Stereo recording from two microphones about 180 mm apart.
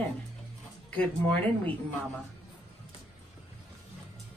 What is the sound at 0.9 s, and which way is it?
Speech, 5° left (ahead or behind).